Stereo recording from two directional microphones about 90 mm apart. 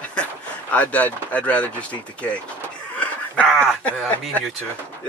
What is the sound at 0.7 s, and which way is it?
Speech, 15° left (ahead or behind).